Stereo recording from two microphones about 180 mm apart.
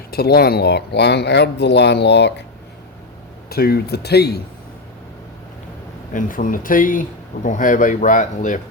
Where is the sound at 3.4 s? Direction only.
60° left (ahead or behind).